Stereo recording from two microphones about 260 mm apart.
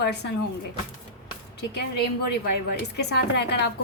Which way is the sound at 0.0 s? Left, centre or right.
Left.